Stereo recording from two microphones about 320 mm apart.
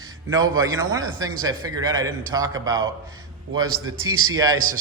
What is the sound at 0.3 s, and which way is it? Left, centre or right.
A man's voice, centre.